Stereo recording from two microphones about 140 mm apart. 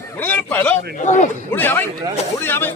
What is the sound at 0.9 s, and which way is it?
Speech, 60° left (ahead or behind).